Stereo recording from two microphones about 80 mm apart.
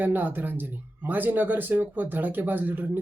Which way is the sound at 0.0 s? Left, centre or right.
Right.